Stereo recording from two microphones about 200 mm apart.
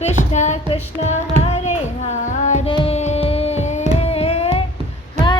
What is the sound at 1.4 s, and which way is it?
Child singing, 35° left (ahead or behind).